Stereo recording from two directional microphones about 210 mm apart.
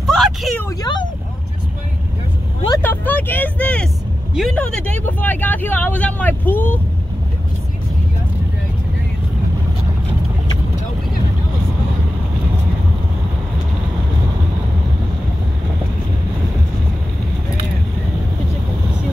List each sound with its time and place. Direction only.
0.0 s a sound: centre (ahead or behind)
0.7 s vehicle: 20° left (ahead or behind)
2.8 s vehicle: 10° left (ahead or behind)